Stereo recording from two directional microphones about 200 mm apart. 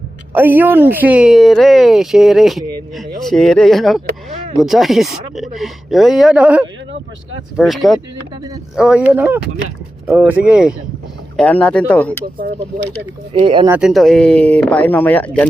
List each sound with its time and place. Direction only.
0.3 s speech: 10° right (ahead or behind)
11.3 s speech: 5° left (ahead or behind)
13.4 s speech: 25° right (ahead or behind)
13.7 s speech: 5° right (ahead or behind)